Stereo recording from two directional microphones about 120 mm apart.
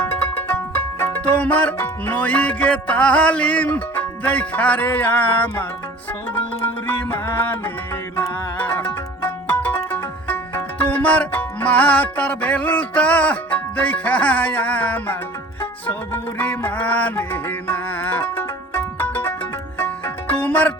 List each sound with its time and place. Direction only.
0.0 s music: 15° left (ahead or behind)
6.8 s music: 15° left (ahead or behind)
8.5 s music: 15° left (ahead or behind)